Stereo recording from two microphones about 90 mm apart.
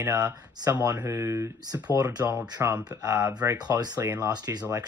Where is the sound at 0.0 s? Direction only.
40° right (ahead or behind).